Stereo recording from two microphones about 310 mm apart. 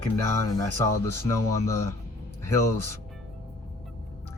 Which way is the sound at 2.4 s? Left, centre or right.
Centre.